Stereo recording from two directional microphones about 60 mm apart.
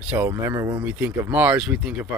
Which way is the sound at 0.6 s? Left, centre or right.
Right.